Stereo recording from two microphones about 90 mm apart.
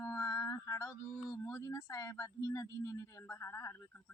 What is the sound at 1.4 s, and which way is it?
Speech, 30° left (ahead or behind).